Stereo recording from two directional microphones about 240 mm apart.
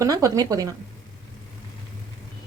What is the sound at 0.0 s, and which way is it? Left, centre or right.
Speech, centre.